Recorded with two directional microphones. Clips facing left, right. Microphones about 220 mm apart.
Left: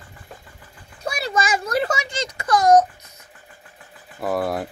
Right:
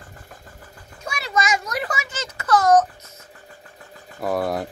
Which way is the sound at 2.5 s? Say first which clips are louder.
Left 1 dB; 15° left (ahead or behind).